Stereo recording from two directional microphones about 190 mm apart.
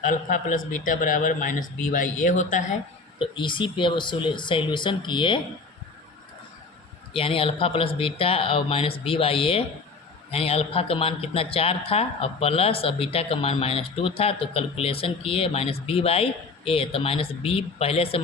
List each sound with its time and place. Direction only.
0.0 s speech: 45° left (ahead or behind)
3.2 s speech: 25° left (ahead or behind)
7.1 s speech: 30° left (ahead or behind)